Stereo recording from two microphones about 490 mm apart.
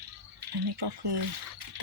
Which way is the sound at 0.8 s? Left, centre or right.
Right.